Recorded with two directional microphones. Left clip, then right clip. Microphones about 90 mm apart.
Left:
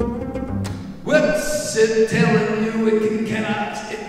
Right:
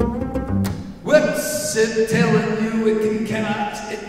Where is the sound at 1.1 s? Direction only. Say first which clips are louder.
Right 1 dB; 35° right (ahead or behind).